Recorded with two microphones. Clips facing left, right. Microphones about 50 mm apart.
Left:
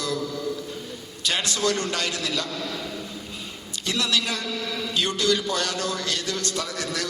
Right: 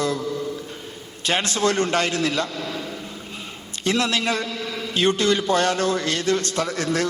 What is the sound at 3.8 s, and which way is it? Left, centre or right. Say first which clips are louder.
A man's voice: right 4 dB; right.